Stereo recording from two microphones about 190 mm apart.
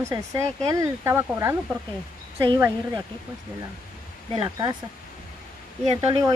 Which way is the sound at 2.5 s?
15° right (ahead or behind).